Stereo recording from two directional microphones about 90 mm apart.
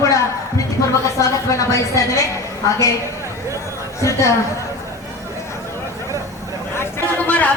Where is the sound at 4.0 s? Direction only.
35° left (ahead or behind).